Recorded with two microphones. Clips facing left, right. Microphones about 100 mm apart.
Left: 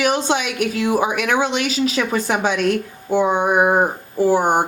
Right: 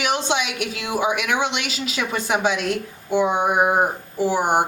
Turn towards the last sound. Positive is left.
turn(degrees=45)  # may be behind; listen again after turning